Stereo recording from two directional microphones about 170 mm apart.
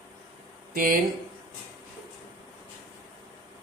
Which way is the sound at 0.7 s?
55° right (ahead or behind).